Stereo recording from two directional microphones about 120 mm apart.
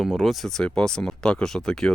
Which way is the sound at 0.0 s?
Centre (ahead or behind).